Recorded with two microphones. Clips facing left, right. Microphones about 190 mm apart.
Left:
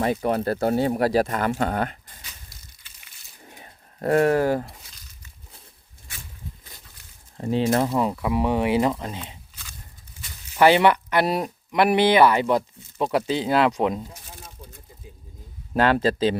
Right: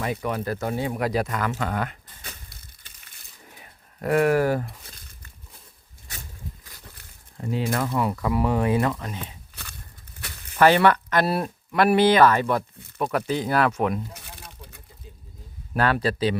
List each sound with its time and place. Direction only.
0.0 s speech: 30° left (ahead or behind)
2.2 s crushing: 50° right (ahead or behind)
3.5 s pigeon: 30° left (ahead or behind)
4.9 s a sound: 55° right (ahead or behind)
7.3 s speech: 30° left (ahead or behind)
10.2 s a sound: 60° right (ahead or behind)
10.6 s speech: 15° left (ahead or behind)
14.2 s a sound: 65° right (ahead or behind)
15.7 s speech: 25° left (ahead or behind)